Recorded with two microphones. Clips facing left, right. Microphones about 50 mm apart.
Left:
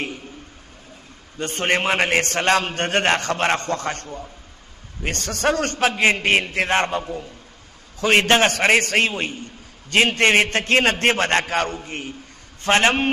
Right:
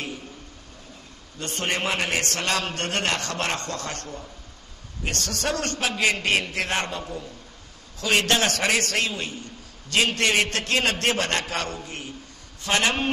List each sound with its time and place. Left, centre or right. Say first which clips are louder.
1.4 s a man's voice: left 6 dB; left
8.0 s a man's voice: left 6 dB; left